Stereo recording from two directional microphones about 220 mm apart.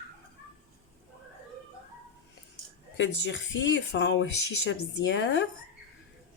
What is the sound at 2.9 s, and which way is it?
Speech, 55° left (ahead or behind).